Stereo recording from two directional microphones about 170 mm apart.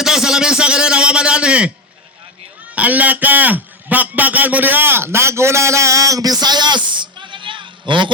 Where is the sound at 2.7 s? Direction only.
10° right (ahead or behind).